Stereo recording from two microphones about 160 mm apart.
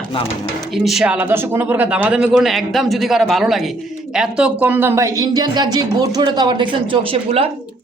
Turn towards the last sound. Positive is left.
turn(degrees=-35)  # may be behind; listen again after turning